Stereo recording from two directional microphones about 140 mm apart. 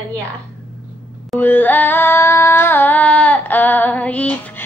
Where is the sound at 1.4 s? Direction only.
15° left (ahead or behind).